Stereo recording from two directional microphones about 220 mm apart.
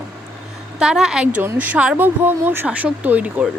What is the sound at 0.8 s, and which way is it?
Speech, 5° right (ahead or behind).